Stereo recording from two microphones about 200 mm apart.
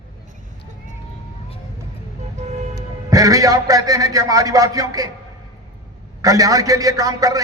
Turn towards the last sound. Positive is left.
turn(degrees=-15)  # may be behind; listen again after turning